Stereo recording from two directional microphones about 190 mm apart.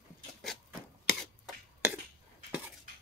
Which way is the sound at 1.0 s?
Centre (ahead or behind).